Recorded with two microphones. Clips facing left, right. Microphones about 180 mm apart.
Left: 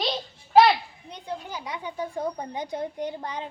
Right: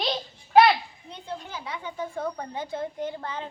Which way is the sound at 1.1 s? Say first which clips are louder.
Left 2 dB; 15° left (ahead or behind).